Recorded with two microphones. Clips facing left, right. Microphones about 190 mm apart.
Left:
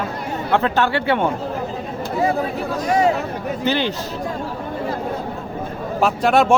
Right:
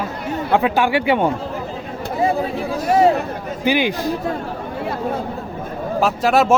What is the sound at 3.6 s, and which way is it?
Speech, 10° right (ahead or behind).